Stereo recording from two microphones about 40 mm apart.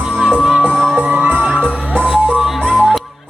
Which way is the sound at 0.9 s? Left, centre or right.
Right.